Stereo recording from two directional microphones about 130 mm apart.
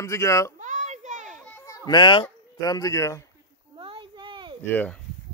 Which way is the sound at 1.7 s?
35° left (ahead or behind).